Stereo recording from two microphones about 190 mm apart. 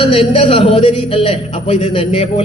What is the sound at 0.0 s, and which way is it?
A man's voice, 30° left (ahead or behind).